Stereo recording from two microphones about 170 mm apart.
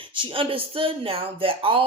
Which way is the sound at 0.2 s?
30° right (ahead or behind).